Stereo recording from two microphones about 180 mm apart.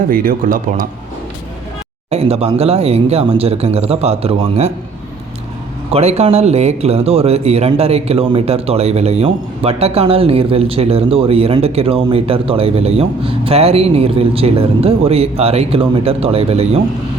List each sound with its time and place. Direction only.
0.1 s speech: 50° right (ahead or behind)
2.0 s speech: 35° right (ahead or behind)
5.9 s speech: 35° right (ahead or behind)